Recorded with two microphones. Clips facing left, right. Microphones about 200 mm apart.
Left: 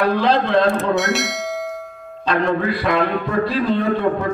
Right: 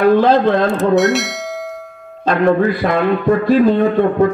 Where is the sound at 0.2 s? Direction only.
50° right (ahead or behind).